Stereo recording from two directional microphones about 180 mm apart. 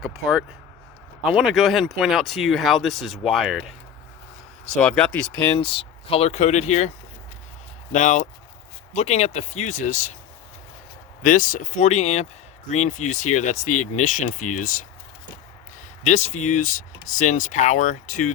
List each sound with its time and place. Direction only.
0.0 s speech: centre (ahead or behind)
5.5 s speech: 30° left (ahead or behind)
7.9 s speech: 40° left (ahead or behind)
11.2 s speech: 50° left (ahead or behind)
16.0 s speech: 40° left (ahead or behind)